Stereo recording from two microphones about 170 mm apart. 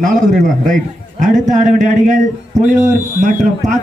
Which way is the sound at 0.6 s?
50° right (ahead or behind).